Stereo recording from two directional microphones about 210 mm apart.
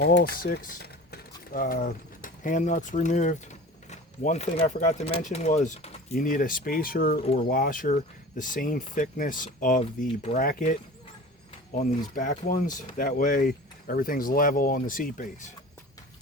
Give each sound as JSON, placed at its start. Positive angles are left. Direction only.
{"t": 0.0, "sound": "speech", "side_deg": 45}